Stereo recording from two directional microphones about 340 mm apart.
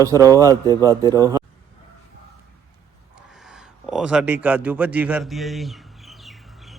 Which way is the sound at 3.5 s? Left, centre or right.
Centre.